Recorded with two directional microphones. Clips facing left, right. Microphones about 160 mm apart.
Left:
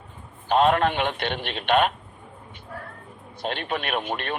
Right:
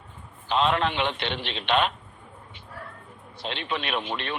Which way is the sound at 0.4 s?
50° left (ahead or behind).